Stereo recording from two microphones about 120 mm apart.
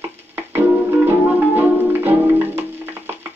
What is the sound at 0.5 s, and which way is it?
Music, 20° right (ahead or behind).